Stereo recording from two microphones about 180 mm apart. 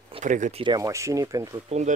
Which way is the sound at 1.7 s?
40° right (ahead or behind).